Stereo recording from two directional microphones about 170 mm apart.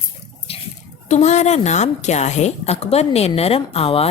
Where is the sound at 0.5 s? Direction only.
35° left (ahead or behind).